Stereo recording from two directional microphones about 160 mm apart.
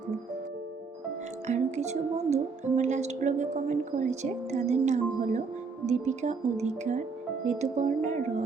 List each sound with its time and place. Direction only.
1.5 s speech: 45° right (ahead or behind)